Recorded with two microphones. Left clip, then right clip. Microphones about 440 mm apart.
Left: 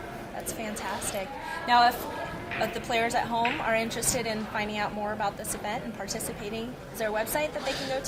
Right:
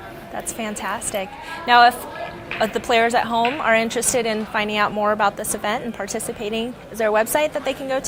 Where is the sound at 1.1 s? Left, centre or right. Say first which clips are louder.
Right 6 dB; right.